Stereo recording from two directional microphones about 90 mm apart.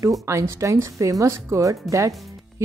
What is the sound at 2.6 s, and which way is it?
Music, 30° right (ahead or behind).